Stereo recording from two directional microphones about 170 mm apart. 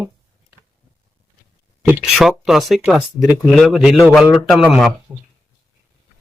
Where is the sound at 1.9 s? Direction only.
Centre (ahead or behind).